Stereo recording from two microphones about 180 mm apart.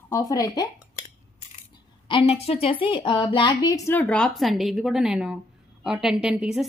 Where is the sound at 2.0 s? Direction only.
30° left (ahead or behind); by 6.7 s 5° right (ahead or behind).